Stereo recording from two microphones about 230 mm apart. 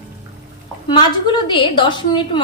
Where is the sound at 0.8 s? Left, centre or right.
Left.